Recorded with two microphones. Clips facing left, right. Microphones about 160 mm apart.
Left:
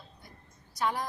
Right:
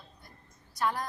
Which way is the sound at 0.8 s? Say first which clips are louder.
Even; 10° left (ahead or behind).